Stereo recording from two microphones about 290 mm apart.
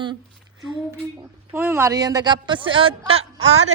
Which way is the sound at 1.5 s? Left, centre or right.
Centre.